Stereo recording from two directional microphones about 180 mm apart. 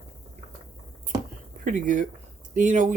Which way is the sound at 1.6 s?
45° right (ahead or behind).